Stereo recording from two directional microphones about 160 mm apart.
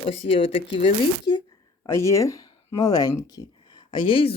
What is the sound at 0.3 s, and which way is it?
Speech, 35° left (ahead or behind).